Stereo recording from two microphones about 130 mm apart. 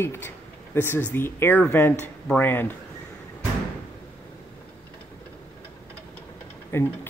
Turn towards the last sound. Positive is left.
turn(degrees=15)  # may be behind; listen again after turning